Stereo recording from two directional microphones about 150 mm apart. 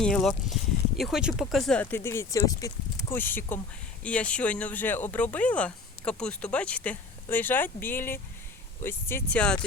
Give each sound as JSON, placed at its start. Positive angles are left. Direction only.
{"t": 0.0, "sound": "speech", "side_deg": 5}
{"t": 1.8, "sound": "speech", "side_deg": 15}